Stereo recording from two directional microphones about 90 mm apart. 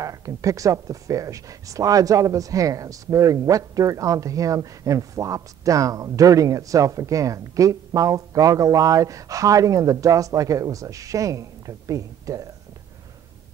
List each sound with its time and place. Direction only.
0.0 s speech: 40° right (ahead or behind)